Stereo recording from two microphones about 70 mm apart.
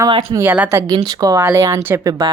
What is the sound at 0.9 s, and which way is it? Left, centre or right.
Speech, right.